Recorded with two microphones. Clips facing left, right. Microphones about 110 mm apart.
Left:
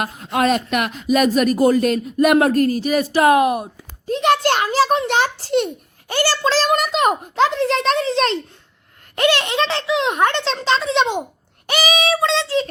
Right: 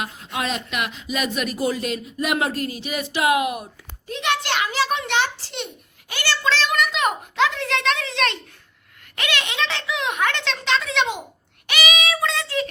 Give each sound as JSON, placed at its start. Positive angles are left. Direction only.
{"t": 0.0, "sound": "a child's voice", "side_deg": 50}
{"t": 11.6, "sound": "child singing", "side_deg": 35}